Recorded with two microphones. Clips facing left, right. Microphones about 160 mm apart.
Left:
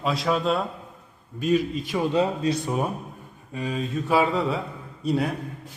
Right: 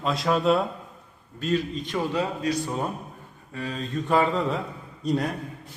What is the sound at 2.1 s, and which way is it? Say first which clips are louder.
A man's voice: left 5 dB; 25° left (ahead or behind).